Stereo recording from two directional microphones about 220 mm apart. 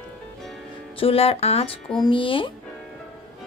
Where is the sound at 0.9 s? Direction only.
25° left (ahead or behind).